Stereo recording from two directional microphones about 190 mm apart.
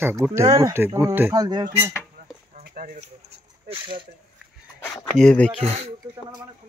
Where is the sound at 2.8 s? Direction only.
40° right (ahead or behind).